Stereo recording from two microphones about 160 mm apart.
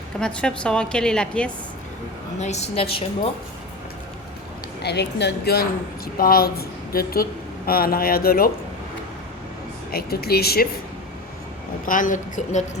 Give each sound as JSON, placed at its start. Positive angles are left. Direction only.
{"t": 0.2, "sound": "a woman's voice", "side_deg": 5}
{"t": 2.4, "sound": "a woman's voice", "side_deg": 45}
{"t": 4.8, "sound": "a woman's voice", "side_deg": 90}
{"t": 6.1, "sound": "speech", "side_deg": 70}
{"t": 9.9, "sound": "speech", "side_deg": 75}
{"t": 11.9, "sound": "a woman's voice", "side_deg": 55}